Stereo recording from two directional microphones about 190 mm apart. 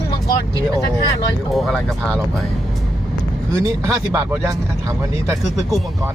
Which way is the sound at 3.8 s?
15° right (ahead or behind).